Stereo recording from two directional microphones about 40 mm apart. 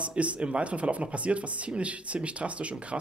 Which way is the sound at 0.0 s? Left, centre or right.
Right.